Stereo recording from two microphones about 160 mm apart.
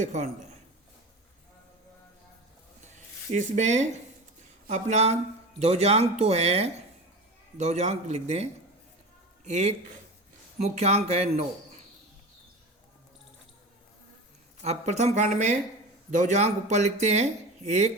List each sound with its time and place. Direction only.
0.0 s speech: 50° right (ahead or behind)
2.8 s a sound: 50° right (ahead or behind)
4.7 s speech: 45° right (ahead or behind)
14.6 s speech: 45° right (ahead or behind)